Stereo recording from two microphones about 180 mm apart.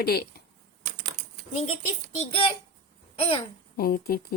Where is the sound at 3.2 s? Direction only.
30° left (ahead or behind).